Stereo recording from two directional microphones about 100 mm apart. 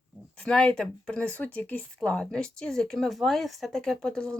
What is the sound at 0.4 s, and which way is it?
Speech, 5° left (ahead or behind).